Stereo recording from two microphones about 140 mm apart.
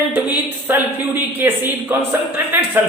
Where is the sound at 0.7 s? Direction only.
15° right (ahead or behind).